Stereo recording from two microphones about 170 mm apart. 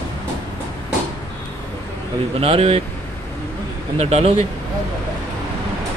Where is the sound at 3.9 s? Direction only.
35° right (ahead or behind).